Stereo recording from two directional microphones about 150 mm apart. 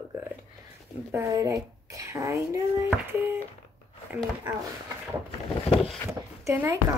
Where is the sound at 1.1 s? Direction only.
20° right (ahead or behind).